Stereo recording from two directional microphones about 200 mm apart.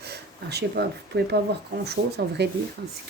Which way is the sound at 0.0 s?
55° right (ahead or behind).